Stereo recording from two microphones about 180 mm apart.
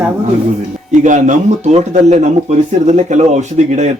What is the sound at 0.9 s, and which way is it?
Speech, 45° right (ahead or behind).